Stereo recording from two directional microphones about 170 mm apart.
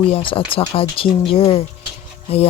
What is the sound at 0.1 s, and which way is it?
Speech, 30° left (ahead or behind).